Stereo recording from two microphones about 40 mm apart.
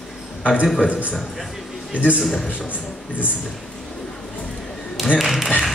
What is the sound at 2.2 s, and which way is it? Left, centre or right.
Speech, centre.